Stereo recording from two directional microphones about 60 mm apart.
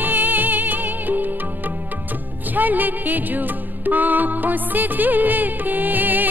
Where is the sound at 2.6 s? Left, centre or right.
Right.